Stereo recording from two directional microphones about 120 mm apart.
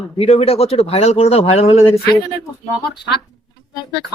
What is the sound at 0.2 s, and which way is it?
Speech, 55° left (ahead or behind).